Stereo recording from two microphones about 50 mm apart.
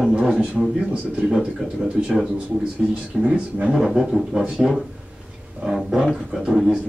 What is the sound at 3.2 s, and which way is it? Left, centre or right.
Speech, right.